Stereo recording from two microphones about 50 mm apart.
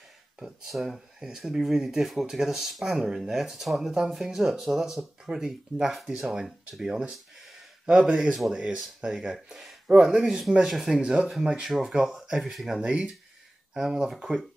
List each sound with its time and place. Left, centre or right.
0.7 s speech: centre
10.7 s speech: centre
11.0 s speech: centre
12.8 s speech: right
13.7 s speech: centre